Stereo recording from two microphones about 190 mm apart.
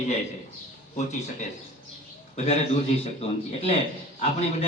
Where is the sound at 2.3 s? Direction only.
35° left (ahead or behind).